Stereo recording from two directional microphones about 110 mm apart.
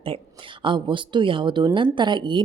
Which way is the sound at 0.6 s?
50° right (ahead or behind).